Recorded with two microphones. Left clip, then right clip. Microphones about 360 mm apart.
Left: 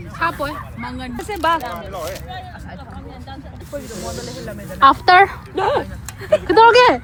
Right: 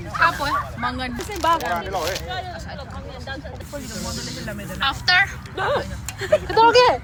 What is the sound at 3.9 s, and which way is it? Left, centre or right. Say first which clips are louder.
Speech: left 2 dB; centre.